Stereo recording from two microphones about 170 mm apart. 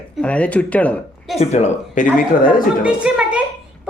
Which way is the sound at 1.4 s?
40° left (ahead or behind).